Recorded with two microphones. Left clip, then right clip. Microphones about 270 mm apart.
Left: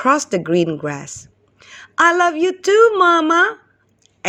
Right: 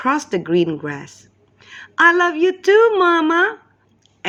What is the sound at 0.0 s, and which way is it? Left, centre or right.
Speech, centre.